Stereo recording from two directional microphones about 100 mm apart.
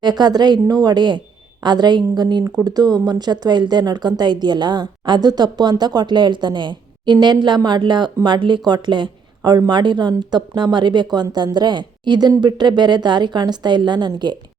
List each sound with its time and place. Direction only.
0.0 s a woman's voice: 45° right (ahead or behind)